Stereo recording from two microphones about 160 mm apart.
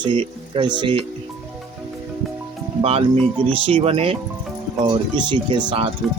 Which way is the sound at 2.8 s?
35° right (ahead or behind).